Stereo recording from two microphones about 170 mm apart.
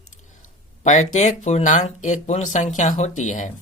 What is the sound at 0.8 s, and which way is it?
Speech, 45° left (ahead or behind).